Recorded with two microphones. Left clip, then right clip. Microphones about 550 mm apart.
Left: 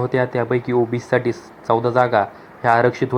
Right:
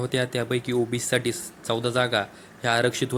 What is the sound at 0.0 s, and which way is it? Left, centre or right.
Speech, right.